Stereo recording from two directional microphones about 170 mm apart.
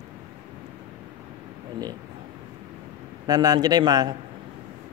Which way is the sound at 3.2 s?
20° right (ahead or behind).